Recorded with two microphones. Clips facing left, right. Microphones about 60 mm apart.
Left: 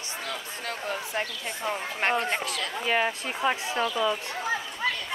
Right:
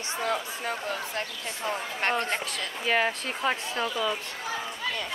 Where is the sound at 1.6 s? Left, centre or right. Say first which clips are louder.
Left 1 dB; centre.